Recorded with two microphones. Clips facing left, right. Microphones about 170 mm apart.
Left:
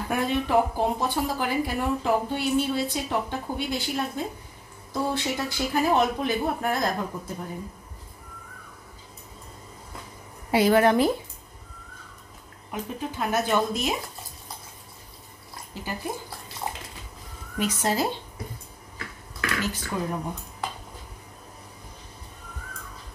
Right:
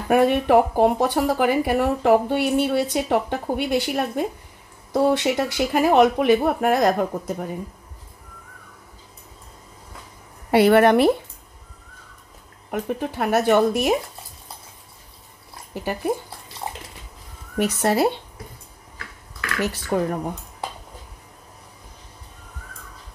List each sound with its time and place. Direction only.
0.1 s speech: 65° right (ahead or behind)
10.5 s speech: 65° right (ahead or behind)
12.7 s speech: 60° right (ahead or behind)
15.7 s speech: 65° right (ahead or behind)
17.6 s speech: 65° right (ahead or behind)
19.6 s speech: 65° right (ahead or behind)